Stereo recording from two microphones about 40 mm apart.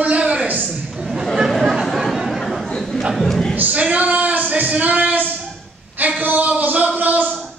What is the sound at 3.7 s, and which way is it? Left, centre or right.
Speech, right.